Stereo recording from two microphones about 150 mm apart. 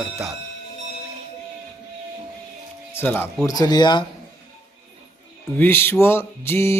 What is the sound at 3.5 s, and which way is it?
Speech, 25° left (ahead or behind).